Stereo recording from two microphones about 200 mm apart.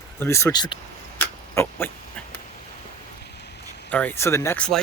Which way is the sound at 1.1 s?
10° left (ahead or behind).